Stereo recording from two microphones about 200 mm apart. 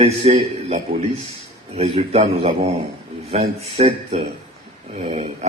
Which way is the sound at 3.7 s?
30° right (ahead or behind).